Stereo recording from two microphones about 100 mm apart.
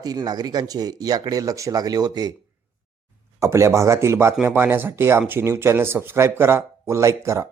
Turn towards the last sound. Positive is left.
turn(degrees=-30)  # may be behind; listen again after turning